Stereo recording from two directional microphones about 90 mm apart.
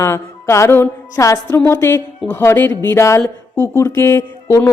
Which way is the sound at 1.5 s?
25° left (ahead or behind).